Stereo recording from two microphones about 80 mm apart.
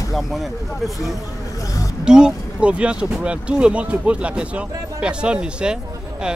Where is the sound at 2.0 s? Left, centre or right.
Centre.